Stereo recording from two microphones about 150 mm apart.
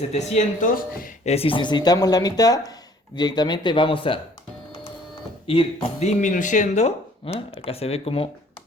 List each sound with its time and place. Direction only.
0.1 s speech: 50° left (ahead or behind)
5.5 s speech: 45° left (ahead or behind)